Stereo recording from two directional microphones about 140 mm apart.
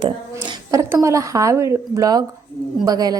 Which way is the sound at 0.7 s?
20° right (ahead or behind).